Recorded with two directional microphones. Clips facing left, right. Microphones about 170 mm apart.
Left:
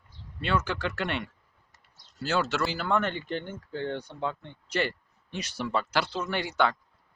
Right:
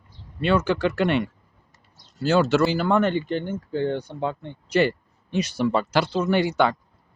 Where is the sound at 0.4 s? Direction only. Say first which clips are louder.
Right 8 dB; 20° right (ahead or behind).